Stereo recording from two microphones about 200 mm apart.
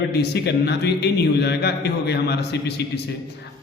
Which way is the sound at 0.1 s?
55° left (ahead or behind).